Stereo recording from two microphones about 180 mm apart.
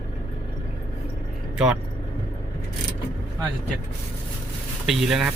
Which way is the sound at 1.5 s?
5° right (ahead or behind).